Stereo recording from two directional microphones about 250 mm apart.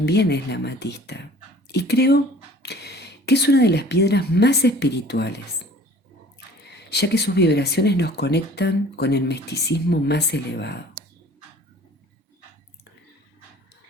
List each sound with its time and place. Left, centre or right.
0.0 s speech: left
6.7 s speech: left